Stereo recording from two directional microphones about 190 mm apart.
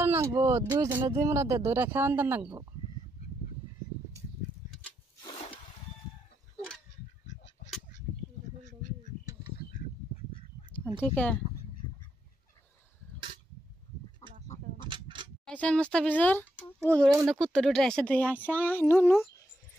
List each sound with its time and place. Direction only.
0.0 s speech: 15° right (ahead or behind)
11.0 s speech: 10° left (ahead or behind)
14.9 s a sound: 25° right (ahead or behind)
15.4 s speech: 5° left (ahead or behind)